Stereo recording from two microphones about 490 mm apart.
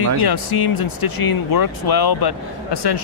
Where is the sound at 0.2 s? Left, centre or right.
Left.